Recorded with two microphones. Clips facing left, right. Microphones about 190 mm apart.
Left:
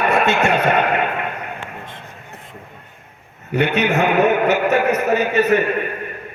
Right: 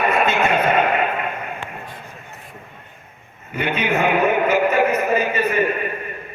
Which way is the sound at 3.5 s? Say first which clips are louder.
Left 4 dB; 75° left (ahead or behind).